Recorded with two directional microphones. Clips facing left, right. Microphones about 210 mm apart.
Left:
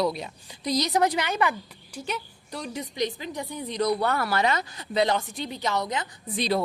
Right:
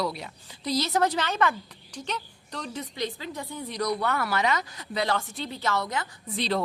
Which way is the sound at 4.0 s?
35° left (ahead or behind).